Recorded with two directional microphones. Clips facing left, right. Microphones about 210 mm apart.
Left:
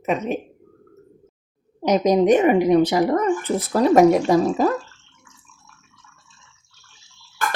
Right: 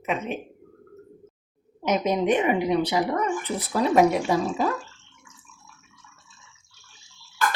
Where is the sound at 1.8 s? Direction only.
35° left (ahead or behind).